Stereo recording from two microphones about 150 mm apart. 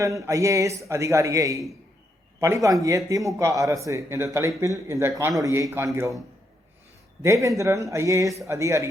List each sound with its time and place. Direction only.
0.0 s speech: 20° right (ahead or behind)